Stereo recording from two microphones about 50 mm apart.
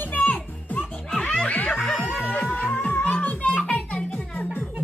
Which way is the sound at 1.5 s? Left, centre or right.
Left.